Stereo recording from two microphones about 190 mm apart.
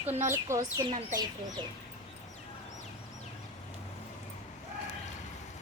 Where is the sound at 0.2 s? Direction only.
15° right (ahead or behind).